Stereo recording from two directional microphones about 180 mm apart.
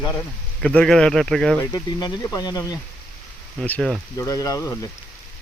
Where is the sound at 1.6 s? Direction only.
20° left (ahead or behind).